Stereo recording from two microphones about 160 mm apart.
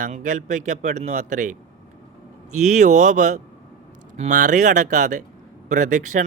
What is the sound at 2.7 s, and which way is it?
Speech, 50° right (ahead or behind).